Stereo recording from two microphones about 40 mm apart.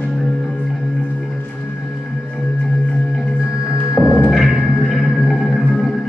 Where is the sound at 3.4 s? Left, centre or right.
Right.